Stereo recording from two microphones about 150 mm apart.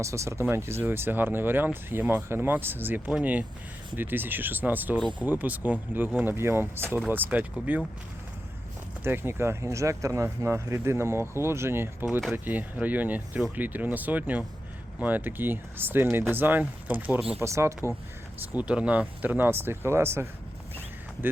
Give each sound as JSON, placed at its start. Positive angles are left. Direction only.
{"t": 0.0, "sound": "speech", "side_deg": -20}
{"t": 9.0, "sound": "speech", "side_deg": -15}
{"t": 18.5, "sound": "speech", "side_deg": -10}